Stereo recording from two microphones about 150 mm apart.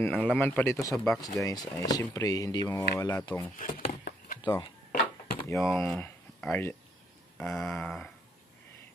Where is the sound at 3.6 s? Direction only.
65° left (ahead or behind).